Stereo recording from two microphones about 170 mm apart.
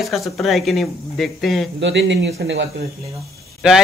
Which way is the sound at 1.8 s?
90° right.